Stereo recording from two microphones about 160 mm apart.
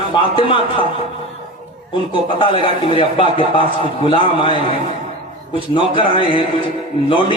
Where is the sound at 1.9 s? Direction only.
30° left (ahead or behind).